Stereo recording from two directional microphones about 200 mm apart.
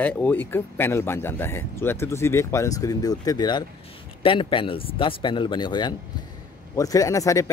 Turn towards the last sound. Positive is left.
turn(degrees=15)  # may be behind; listen again after turning